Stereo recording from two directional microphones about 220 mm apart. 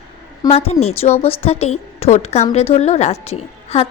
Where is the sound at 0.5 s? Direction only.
30° left (ahead or behind).